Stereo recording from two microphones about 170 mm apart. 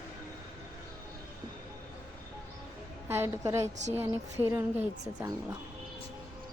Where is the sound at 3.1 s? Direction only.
15° right (ahead or behind).